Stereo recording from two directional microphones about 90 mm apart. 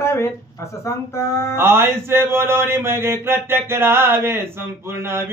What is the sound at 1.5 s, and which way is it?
Mantra, 25° right (ahead or behind).